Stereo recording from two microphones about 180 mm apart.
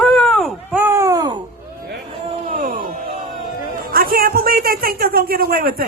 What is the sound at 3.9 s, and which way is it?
A man's voice, 55° right (ahead or behind).